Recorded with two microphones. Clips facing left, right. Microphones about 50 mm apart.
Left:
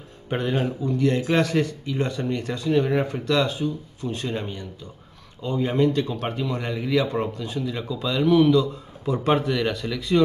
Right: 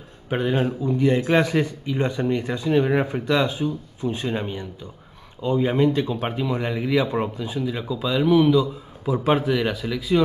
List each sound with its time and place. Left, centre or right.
0.3 s speech: centre